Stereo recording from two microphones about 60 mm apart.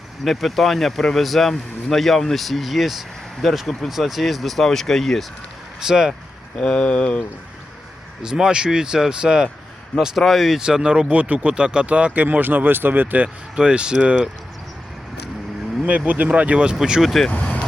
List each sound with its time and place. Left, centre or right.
0.3 s speech: centre
5.8 s speech: centre
6.6 s speech: centre
8.2 s speech: centre
10.6 s speech: centre
11.2 s speech: right
13.2 s speech: centre
15.9 s speech: right
17.0 s speech: centre
17.3 s vehicle: left